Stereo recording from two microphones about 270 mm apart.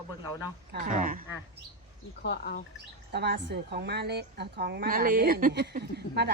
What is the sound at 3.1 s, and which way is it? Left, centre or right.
A woman's voice, right.